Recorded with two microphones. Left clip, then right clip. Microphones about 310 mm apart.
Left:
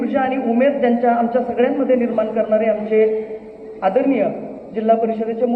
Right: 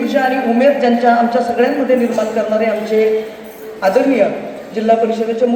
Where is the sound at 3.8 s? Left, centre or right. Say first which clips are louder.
Right 4 dB; right.